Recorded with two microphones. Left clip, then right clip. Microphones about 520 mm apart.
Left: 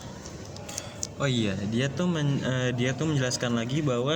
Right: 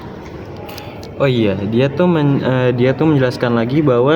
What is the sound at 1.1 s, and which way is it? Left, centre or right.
Speech, left.